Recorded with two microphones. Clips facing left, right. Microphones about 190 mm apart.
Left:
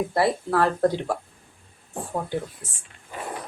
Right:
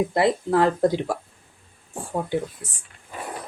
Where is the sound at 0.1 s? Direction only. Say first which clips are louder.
Right 2 dB; 20° right (ahead or behind).